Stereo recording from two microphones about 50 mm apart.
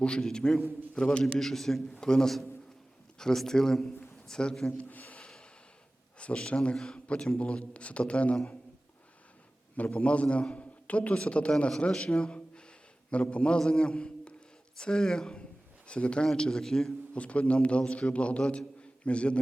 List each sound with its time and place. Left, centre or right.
0.0 s a man's voice: centre
4.8 s a sound: left
6.1 s a man's voice: left
9.7 s a man's voice: left; by 16.9 s centre
17.2 s a man's voice: left